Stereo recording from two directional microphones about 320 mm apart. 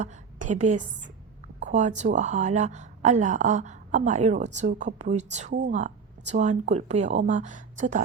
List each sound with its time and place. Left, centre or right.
0.0 s a woman's voice: right